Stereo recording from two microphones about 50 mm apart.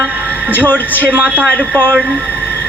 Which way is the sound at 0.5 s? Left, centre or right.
Left.